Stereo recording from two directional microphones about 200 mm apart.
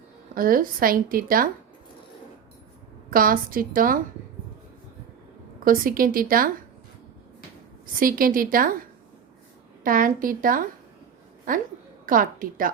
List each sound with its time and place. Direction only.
0.3 s a woman's voice: 45° right (ahead or behind)
3.1 s a woman's voice: 45° right (ahead or behind)
5.6 s a woman's voice: 45° right (ahead or behind)
7.9 s a woman's voice: 45° right (ahead or behind)
9.8 s a woman's voice: 45° right (ahead or behind)